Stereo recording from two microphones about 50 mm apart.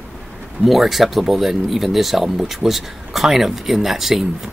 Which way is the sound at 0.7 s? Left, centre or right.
Centre.